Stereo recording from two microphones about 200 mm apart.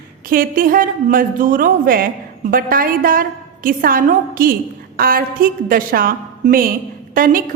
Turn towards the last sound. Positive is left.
turn(degrees=-45)  # may be behind; listen again after turning